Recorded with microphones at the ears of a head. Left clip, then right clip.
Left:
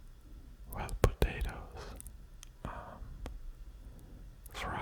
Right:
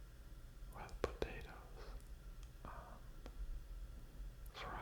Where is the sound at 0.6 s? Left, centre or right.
Left.